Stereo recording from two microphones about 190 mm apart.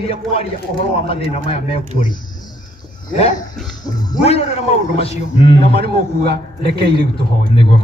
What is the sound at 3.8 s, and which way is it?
A man's voice, 20° left (ahead or behind).